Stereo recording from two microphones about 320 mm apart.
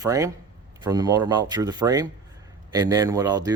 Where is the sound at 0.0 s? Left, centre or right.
Centre.